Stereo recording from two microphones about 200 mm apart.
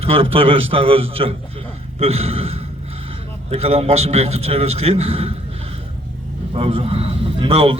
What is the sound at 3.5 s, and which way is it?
A man's voice, 30° right (ahead or behind).